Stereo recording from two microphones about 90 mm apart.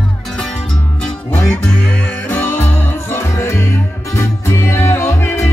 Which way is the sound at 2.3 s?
20° left (ahead or behind).